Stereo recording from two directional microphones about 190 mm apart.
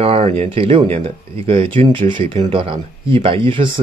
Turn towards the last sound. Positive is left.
turn(degrees=-25)  # may be behind; listen again after turning